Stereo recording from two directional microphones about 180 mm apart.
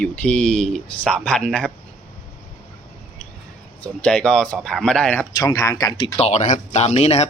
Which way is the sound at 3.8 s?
5° left (ahead or behind).